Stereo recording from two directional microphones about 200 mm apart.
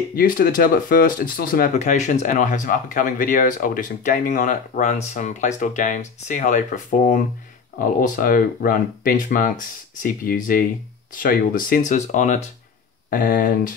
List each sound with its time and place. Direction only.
0.1 s speech: 45° left (ahead or behind)